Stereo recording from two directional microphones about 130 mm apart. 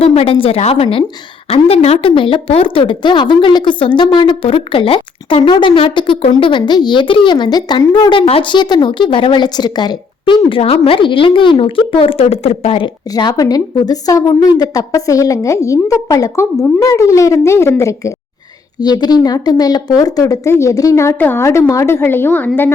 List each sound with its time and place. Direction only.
0.0 s a woman's voice: 50° left (ahead or behind)
13.1 s a woman's voice: 30° left (ahead or behind); by 22.7 s 15° left (ahead or behind)